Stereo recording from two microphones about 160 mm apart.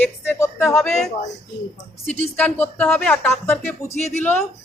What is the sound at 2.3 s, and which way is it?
Speech, 10° left (ahead or behind).